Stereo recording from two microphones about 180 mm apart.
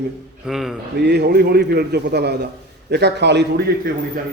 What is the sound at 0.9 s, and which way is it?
A man's voice, 65° right (ahead or behind).